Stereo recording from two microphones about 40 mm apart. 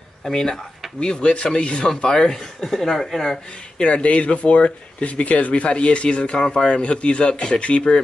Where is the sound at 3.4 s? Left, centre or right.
Left.